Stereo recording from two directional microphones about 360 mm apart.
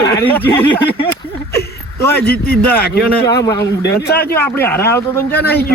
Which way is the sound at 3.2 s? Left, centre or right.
Centre.